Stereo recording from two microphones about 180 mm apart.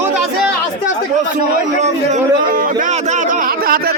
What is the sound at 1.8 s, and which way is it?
A man's voice, 45° right (ahead or behind).